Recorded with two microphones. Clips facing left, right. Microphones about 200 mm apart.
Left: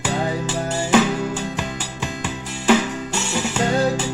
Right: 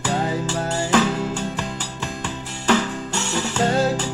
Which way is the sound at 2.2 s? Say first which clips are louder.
Left 3 dB; 5° left (ahead or behind).